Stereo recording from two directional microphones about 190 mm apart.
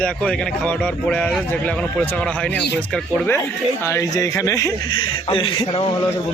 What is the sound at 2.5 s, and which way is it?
Speech, 60° left (ahead or behind).